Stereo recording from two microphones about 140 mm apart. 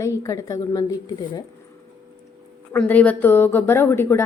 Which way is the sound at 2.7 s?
10° left (ahead or behind).